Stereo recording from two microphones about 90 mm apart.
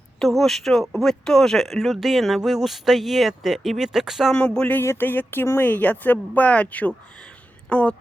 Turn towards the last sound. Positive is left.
turn(degrees=10)  # may be behind; listen again after turning